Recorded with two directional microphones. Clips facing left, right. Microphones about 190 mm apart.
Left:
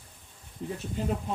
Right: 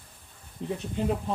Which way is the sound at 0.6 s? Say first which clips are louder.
Right 3 dB; centre (ahead or behind).